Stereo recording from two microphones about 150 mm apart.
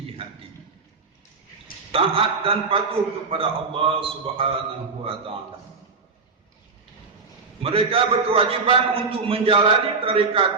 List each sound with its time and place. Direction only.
1.9 s a man's voice: 40° right (ahead or behind)
7.6 s a man's voice: 40° right (ahead or behind)